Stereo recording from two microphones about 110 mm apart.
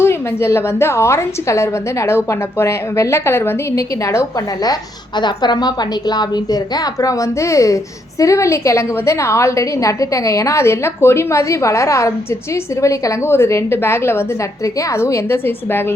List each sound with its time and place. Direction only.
0.0 s a woman's voice: 25° left (ahead or behind)